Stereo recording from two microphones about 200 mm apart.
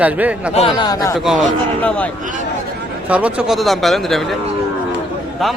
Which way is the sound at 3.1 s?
5° right (ahead or behind).